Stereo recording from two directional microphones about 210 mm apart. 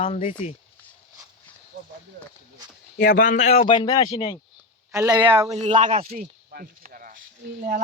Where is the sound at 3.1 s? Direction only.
40° left (ahead or behind).